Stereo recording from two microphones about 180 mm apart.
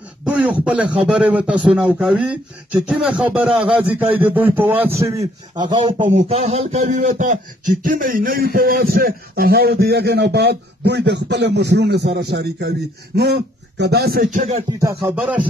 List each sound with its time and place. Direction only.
0.2 s speech: 5° right (ahead or behind); by 6.0 s 30° right (ahead or behind)
6.0 s a sound: 35° right (ahead or behind)
14.7 s speech: 20° right (ahead or behind)